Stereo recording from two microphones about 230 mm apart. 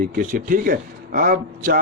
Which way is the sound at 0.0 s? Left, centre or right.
Right.